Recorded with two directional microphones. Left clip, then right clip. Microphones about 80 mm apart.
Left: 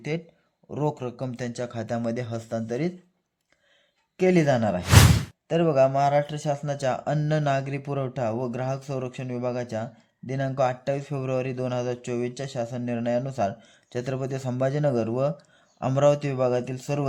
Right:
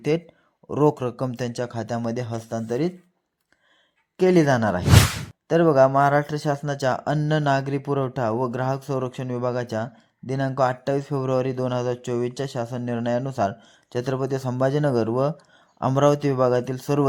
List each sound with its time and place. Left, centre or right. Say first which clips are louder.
0.1 s speech: right 7 dB; right
1.3 s speech: right 4 dB; right
1.7 s speech: right 2 dB; centre
4.2 s speech: right 3 dB; centre
5.5 s speech: right 4 dB; right